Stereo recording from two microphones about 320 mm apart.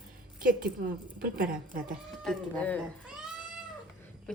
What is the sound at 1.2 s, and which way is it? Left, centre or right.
Speech, right.